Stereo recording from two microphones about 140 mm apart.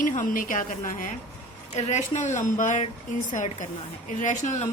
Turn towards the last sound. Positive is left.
turn(degrees=55)  # may be behind; listen again after turning